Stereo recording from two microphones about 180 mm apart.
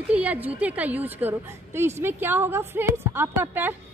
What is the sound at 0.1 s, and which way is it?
A woman's voice, 10° right (ahead or behind).